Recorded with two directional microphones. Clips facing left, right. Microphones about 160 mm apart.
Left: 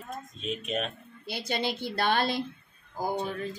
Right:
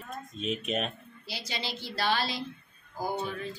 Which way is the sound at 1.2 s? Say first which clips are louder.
Left 7 dB; 55° left (ahead or behind).